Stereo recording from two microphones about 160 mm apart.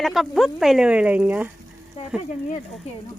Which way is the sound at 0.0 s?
Centre (ahead or behind).